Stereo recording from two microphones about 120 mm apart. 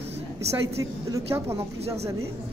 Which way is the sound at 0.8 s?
25° right (ahead or behind).